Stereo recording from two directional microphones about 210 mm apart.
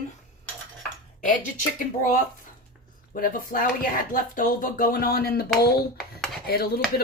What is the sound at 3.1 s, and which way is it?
Speech, 40° left (ahead or behind).